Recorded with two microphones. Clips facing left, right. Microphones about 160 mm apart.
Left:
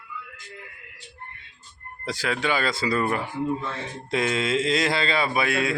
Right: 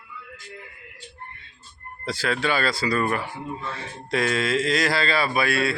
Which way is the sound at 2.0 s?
15° left (ahead or behind).